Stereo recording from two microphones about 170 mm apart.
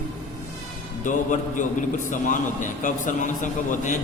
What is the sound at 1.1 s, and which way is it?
A man's voice, 50° left (ahead or behind).